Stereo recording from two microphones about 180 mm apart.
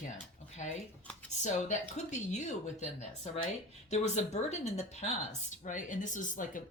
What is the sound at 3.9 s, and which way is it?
Speech, 40° left (ahead or behind).